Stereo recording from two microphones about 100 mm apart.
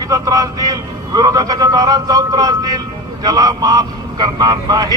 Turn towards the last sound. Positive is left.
turn(degrees=-40)  # may be behind; listen again after turning